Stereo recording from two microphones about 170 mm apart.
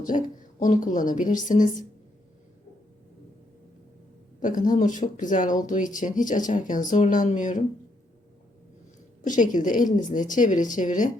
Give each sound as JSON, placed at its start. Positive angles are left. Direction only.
{"t": 0.0, "sound": "speech", "side_deg": 50}
{"t": 4.4, "sound": "speech", "side_deg": 50}
{"t": 9.2, "sound": "speech", "side_deg": 50}